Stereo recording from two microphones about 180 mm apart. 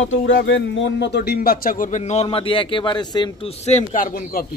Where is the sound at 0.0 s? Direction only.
90° left; by 3.5 s 25° left (ahead or behind).